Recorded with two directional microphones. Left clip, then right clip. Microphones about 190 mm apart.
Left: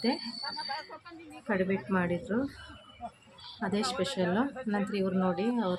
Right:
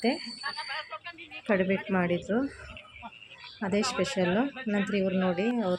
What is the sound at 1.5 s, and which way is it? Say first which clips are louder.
Speech: right 3 dB; 15° right (ahead or behind).